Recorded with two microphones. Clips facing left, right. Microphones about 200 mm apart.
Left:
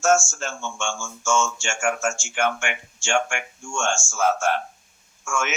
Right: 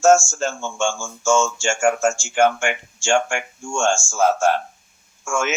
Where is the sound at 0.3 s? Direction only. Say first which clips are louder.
Right 6 dB; 35° right (ahead or behind).